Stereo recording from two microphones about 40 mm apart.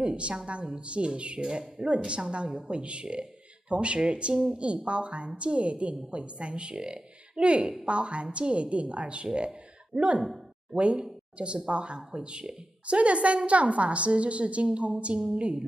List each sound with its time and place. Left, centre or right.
0.0 s a woman's voice: right
10.2 s a sound: centre
10.8 s a woman's voice: right